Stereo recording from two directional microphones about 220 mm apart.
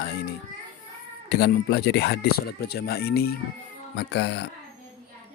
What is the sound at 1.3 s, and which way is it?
Speech, 45° left (ahead or behind).